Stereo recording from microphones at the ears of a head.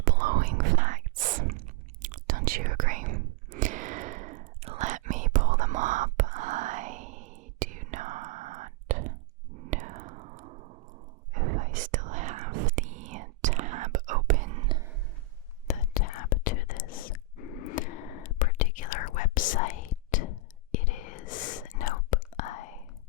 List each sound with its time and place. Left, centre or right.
0.0 s whispering: right
15.6 s whispering: left